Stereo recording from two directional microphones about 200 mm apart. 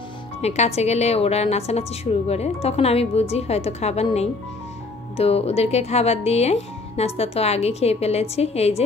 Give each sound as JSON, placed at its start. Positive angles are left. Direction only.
{"t": 0.4, "sound": "a woman's voice", "side_deg": 30}